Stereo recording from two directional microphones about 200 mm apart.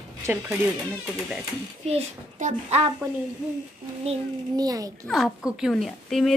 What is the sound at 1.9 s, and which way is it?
Speech, 35° right (ahead or behind).